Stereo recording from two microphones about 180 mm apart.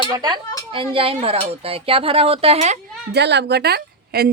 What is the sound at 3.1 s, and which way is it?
A woman's voice, 70° right (ahead or behind).